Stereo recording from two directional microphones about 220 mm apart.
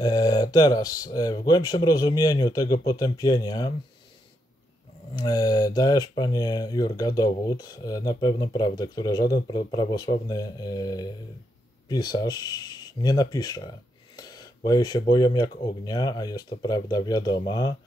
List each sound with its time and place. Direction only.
0.0 s speech: 15° left (ahead or behind)
5.1 s speech: 15° left (ahead or behind)